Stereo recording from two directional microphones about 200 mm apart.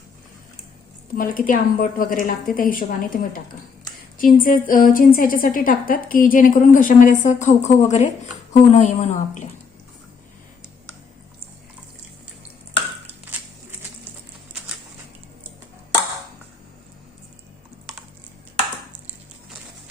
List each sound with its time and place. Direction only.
1.1 s a woman's voice: 45° left (ahead or behind)
4.2 s a woman's voice: 45° left (ahead or behind)